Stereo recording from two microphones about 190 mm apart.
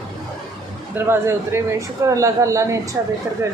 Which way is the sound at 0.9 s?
15° right (ahead or behind).